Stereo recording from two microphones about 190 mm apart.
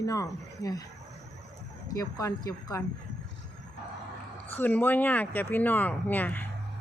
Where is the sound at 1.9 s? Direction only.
15° left (ahead or behind).